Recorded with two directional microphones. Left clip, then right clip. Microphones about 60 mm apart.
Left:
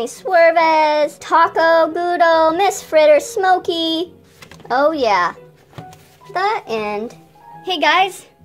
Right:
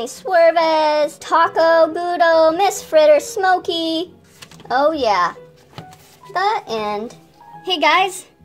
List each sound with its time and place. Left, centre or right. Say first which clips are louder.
0.3 s female singing: left 1 dB; centre
6.3 s a child's voice: even; centre